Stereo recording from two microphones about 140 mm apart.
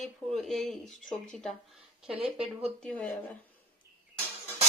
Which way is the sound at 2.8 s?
5° left (ahead or behind).